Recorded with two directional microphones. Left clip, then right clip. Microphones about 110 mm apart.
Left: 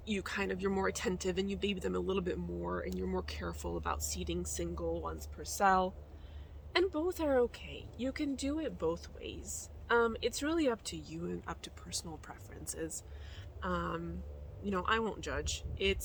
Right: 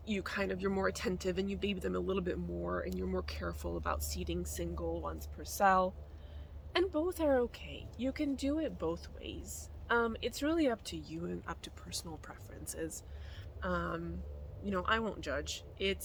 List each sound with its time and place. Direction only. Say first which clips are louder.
0.0 s speech: even; 20° left (ahead or behind)